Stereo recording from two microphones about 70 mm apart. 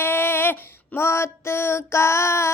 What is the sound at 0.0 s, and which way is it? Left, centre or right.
Female singing, left.